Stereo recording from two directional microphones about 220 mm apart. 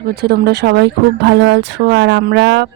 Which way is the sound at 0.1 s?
45° right (ahead or behind).